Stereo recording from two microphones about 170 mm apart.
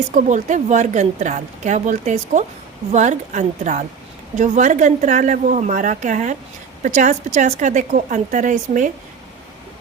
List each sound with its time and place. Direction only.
0.1 s speech: 45° right (ahead or behind)